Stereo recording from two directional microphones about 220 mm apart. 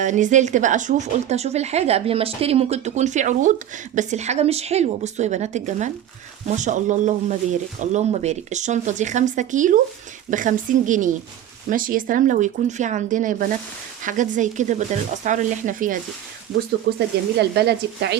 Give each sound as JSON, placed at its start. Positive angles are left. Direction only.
{"t": 0.0, "sound": "speech", "side_deg": -35}
{"t": 16.9, "sound": "speech", "side_deg": -50}